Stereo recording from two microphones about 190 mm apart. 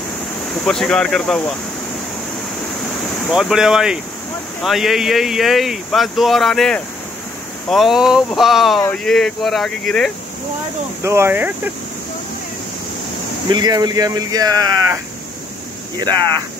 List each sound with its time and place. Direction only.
0.7 s speech: 5° left (ahead or behind)
3.3 s speech: centre (ahead or behind)
11.0 s speech: 15° right (ahead or behind)
13.5 s speech: 20° right (ahead or behind)